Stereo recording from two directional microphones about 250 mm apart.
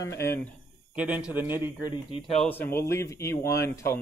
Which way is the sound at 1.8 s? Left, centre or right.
Centre.